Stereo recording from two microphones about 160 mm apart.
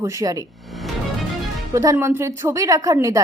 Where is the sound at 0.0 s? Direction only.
20° right (ahead or behind).